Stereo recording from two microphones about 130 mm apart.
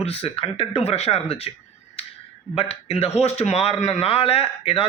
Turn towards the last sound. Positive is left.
turn(degrees=45)  # may be behind; listen again after turning